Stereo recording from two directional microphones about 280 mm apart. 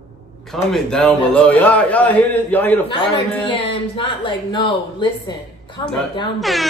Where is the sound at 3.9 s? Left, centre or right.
Centre.